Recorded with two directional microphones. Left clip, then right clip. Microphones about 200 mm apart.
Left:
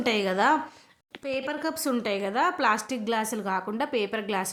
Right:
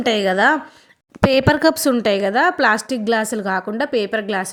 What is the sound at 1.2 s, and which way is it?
A woman's voice, 40° right (ahead or behind).